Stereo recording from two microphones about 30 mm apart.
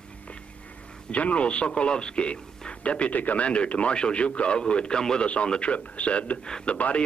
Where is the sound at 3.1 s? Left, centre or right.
Left.